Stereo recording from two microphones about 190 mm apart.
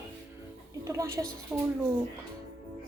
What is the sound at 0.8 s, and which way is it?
Speech, 15° right (ahead or behind).